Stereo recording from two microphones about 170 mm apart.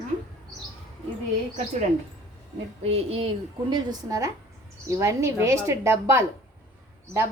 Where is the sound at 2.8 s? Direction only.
35° right (ahead or behind).